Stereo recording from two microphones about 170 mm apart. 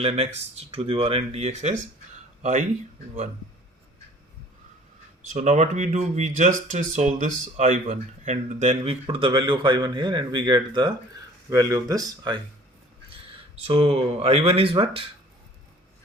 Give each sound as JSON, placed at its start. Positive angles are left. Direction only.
{"t": 0.5, "sound": "speech", "side_deg": -35}
{"t": 5.3, "sound": "speech", "side_deg": -40}
{"t": 13.6, "sound": "speech", "side_deg": -35}